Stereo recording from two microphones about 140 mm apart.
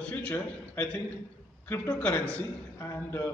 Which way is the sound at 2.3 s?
20° left (ahead or behind).